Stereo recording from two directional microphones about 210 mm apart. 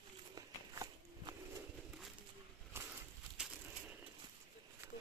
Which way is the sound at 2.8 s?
10° right (ahead or behind).